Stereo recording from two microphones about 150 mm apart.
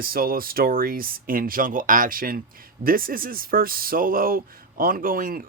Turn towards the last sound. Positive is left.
turn(degrees=-70)  # may be behind; listen again after turning